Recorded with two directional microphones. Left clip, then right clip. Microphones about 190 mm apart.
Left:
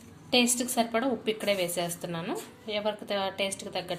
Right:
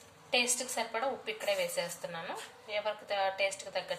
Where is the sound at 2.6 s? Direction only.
40° left (ahead or behind).